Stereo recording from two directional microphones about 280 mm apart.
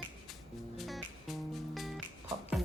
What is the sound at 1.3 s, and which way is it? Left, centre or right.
Music, centre.